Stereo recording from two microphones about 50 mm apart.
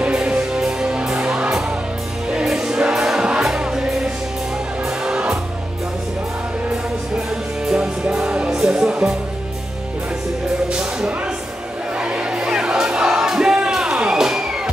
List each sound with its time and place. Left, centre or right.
0.1 s music: centre
7.6 s music: centre
10.7 s music: centre